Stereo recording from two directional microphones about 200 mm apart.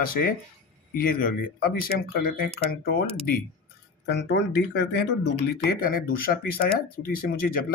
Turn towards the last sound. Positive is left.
turn(degrees=45)  # may be behind; listen again after turning